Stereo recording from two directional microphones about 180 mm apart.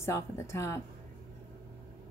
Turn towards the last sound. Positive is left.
turn(degrees=15)  # may be behind; listen again after turning